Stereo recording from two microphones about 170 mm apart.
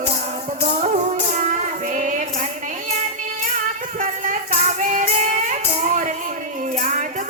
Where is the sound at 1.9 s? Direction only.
45° right (ahead or behind).